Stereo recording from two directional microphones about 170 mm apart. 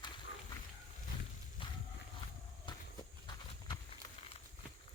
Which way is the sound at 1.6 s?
30° left (ahead or behind).